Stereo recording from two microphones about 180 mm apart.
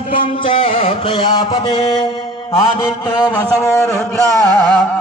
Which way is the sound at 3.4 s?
15° left (ahead or behind).